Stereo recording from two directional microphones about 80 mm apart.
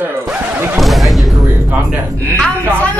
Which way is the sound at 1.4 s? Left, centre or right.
Right.